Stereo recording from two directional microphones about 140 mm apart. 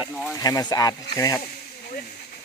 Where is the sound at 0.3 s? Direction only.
25° left (ahead or behind).